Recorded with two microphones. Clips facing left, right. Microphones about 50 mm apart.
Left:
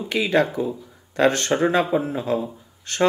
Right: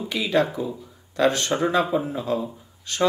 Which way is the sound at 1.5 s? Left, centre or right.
Left.